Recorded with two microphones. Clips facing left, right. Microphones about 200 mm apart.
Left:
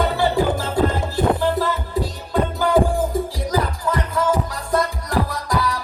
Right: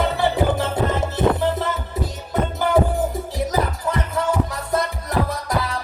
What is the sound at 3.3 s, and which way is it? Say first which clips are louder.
Music: even; 20° right (ahead or behind).